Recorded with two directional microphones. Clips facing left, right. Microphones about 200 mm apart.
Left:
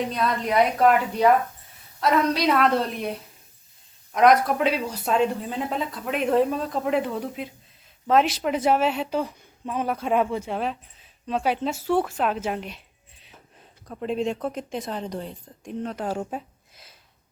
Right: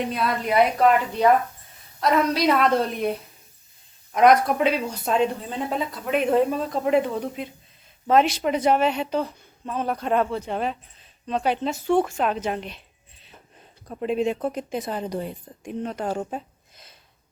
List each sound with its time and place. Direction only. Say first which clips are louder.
0.1 s speech: even; 5° right (ahead or behind); by 10.5 s 10° left (ahead or behind)
10.5 s speech: right 1 dB; centre (ahead or behind)
13.8 s speech: right 2 dB; 5° right (ahead or behind)